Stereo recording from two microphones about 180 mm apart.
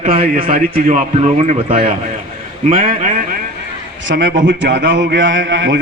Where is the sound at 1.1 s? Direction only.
35° right (ahead or behind).